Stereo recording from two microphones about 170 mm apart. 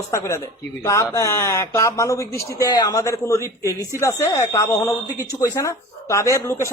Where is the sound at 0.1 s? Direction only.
15° left (ahead or behind).